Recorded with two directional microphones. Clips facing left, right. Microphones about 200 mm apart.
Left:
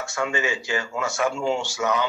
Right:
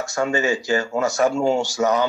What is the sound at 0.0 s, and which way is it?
Speech, 40° right (ahead or behind).